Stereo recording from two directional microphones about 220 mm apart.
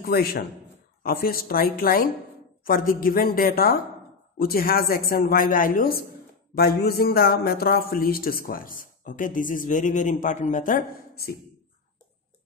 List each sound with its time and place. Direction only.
0.0 s a woman's voice: 45° left (ahead or behind)